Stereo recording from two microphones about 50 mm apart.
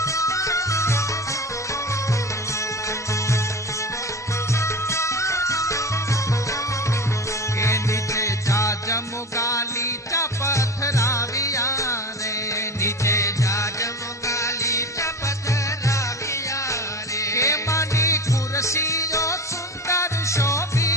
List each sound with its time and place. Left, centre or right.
0.0 s music: left
4.5 s music: left
7.6 s music: left